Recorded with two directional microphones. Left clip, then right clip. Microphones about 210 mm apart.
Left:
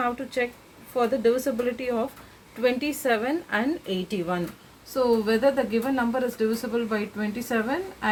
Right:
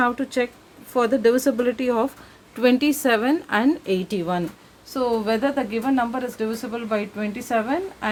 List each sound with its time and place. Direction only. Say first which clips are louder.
0.0 s a woman's voice: right 5 dB; 50° right (ahead or behind)
4.9 s a woman's voice: even; 35° right (ahead or behind)